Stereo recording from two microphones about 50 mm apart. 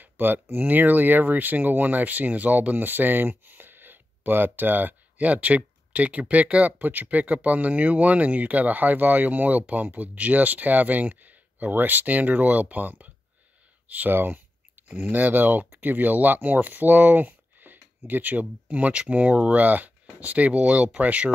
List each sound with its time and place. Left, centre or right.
0.0 s speech: right
14.1 s speech: right